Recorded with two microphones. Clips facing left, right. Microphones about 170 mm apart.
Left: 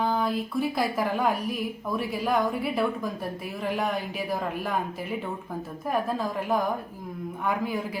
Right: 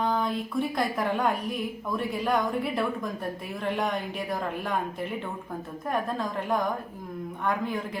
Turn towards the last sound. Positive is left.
turn(degrees=5)  # may be behind; listen again after turning